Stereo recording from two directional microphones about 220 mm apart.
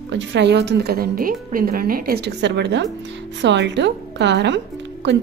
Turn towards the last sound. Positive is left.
turn(degrees=-55)  # may be behind; listen again after turning